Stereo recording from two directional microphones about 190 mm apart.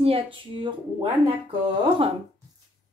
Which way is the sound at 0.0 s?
30° right (ahead or behind).